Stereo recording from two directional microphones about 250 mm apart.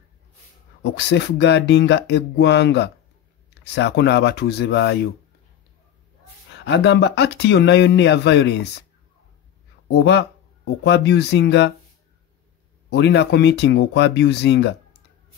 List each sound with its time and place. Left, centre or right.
0.9 s speech: left
6.5 s speech: left
9.9 s speech: left
12.9 s speech: left